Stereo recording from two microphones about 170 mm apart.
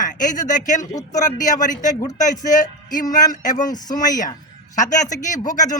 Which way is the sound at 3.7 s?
25° left (ahead or behind).